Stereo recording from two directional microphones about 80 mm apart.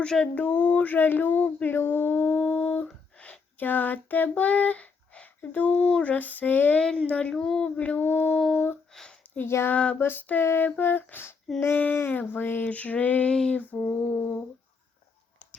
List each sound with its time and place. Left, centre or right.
0.0 s speech: centre
2.8 s child singing: centre
6.0 s speech: centre
8.9 s a sound: centre
9.2 s a sound: left
9.5 s a sound: left
9.7 s speech: centre
13.3 s speech: centre
13.7 s speech: left